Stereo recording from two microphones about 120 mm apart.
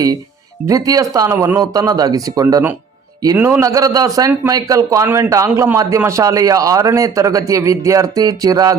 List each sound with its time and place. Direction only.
0.7 s speech: 30° right (ahead or behind)
3.3 s a man's voice: 15° right (ahead or behind)
3.6 s speech: 30° right (ahead or behind)